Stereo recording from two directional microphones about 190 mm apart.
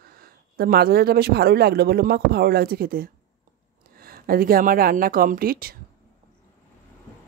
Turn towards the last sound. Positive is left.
turn(degrees=-50)  # may be behind; listen again after turning